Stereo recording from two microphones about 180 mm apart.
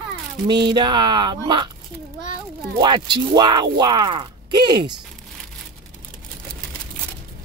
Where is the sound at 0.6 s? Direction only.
25° right (ahead or behind).